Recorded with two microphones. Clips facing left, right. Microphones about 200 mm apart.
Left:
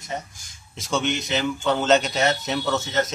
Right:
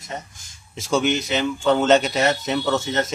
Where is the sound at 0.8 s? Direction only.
5° right (ahead or behind).